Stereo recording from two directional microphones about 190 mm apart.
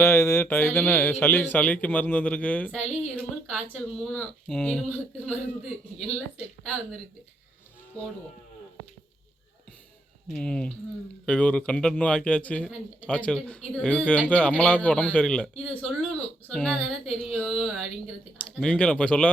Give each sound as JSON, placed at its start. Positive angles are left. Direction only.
{"t": 0.0, "sound": "speech", "side_deg": 15}
{"t": 6.7, "sound": "speech", "side_deg": 5}
{"t": 10.2, "sound": "speech", "side_deg": 5}